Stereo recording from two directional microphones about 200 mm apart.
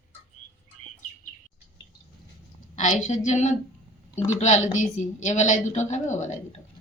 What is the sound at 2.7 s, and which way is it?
A woman's voice, 35° left (ahead or behind).